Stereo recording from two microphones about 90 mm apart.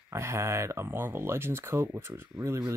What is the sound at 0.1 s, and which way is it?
Speech, 30° right (ahead or behind).